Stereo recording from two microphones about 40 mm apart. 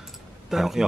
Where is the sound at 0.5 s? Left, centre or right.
Centre.